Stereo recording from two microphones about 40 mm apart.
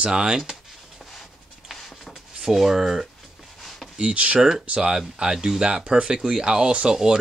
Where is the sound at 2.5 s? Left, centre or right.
Centre.